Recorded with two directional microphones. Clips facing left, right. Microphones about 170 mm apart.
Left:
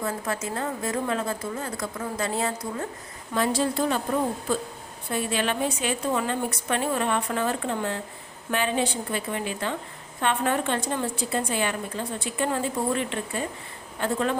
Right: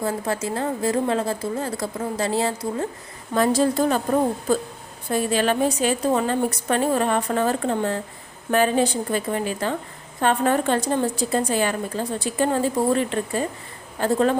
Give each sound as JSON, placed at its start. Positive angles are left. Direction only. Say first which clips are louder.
{"t": 0.0, "sound": "a woman's voice", "louder": "right 4 dB", "side_deg": -30}
{"t": 3.3, "sound": "a woman's voice", "louder": "right 5 dB", "side_deg": -45}